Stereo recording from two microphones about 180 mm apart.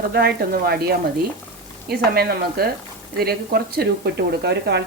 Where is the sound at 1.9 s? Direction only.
60° right (ahead or behind).